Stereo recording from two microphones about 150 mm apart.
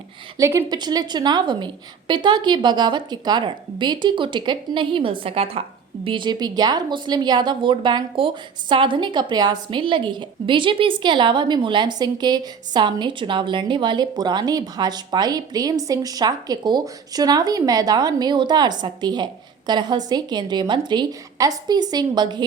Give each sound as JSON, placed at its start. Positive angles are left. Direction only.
{"t": 0.3, "sound": "a woman's voice", "side_deg": -20}